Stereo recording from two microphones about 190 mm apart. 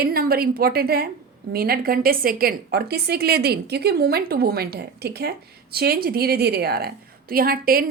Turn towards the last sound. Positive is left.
turn(degrees=-50)  # may be behind; listen again after turning